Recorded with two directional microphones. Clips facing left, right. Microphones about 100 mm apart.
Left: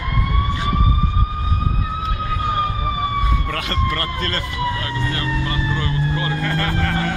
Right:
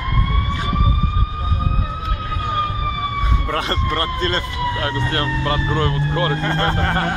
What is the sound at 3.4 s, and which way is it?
Speech, 30° right (ahead or behind).